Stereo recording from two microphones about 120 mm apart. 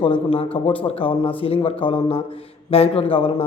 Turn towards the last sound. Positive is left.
turn(degrees=50)  # may be behind; listen again after turning